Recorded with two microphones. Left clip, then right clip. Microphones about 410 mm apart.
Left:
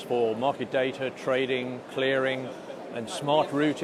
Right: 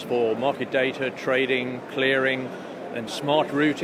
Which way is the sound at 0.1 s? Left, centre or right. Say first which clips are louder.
Right 3 dB; left.